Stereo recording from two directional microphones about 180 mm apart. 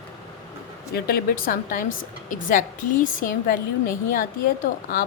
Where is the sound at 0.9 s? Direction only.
55° left (ahead or behind).